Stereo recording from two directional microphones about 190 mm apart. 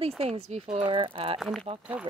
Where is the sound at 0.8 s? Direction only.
25° right (ahead or behind).